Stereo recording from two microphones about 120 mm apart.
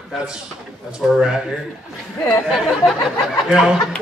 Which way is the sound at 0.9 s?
5° right (ahead or behind).